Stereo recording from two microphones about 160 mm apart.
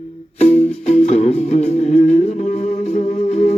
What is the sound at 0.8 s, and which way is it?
Music, 45° left (ahead or behind).